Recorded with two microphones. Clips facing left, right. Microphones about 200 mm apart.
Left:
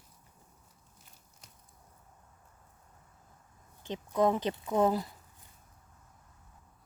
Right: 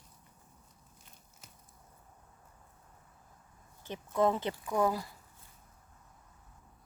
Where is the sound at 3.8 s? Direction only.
15° left (ahead or behind).